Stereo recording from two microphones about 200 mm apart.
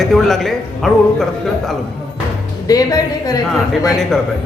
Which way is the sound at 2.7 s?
15° left (ahead or behind).